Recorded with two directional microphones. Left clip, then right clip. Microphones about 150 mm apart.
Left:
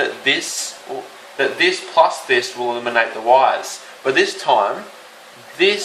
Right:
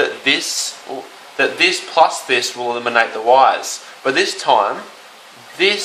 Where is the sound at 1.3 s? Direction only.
35° right (ahead or behind).